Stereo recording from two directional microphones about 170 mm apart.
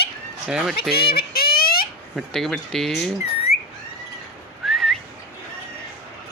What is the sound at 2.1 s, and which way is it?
Speech, centre (ahead or behind).